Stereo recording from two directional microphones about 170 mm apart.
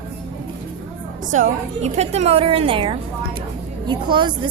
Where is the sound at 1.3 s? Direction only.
45° right (ahead or behind).